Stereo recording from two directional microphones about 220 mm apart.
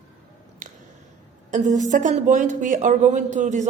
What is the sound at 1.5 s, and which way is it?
A man's voice, 35° right (ahead or behind).